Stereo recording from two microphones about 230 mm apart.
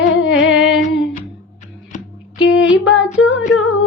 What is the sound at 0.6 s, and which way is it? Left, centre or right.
Music, left.